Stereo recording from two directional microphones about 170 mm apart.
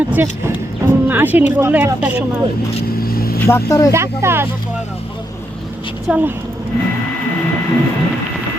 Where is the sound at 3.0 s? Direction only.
60° left (ahead or behind).